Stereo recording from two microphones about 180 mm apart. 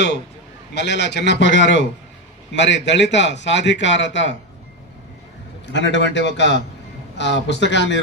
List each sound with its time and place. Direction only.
0.7 s a man's voice: 75° left (ahead or behind)
5.7 s a man's voice: 80° left